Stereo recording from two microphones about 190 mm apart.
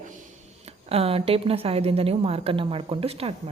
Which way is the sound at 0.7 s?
30° right (ahead or behind).